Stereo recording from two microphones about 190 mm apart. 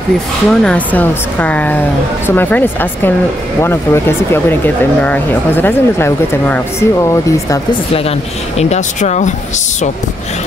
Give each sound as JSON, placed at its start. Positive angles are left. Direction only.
{"t": 0.5, "sound": "speech", "side_deg": 5}
{"t": 8.5, "sound": "speech", "side_deg": 35}